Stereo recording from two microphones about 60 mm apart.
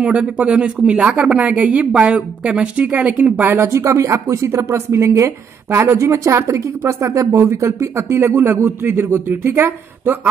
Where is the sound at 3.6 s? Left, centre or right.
Right.